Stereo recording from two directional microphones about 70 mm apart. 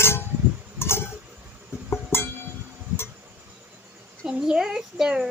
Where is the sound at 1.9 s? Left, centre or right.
Left.